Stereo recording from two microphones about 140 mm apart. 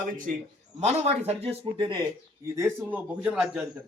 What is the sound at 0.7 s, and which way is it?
Speech, 55° right (ahead or behind).